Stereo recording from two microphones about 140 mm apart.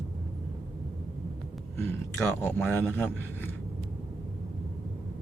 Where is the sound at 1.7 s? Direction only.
15° left (ahead or behind).